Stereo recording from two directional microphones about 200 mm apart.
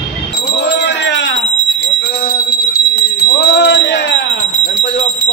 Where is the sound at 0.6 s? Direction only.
60° left (ahead or behind).